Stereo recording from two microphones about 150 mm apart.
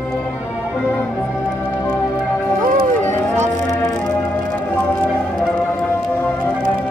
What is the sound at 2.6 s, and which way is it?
Run, 65° right (ahead or behind).